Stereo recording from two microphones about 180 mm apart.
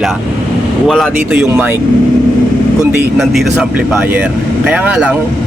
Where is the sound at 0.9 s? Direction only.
Centre (ahead or behind).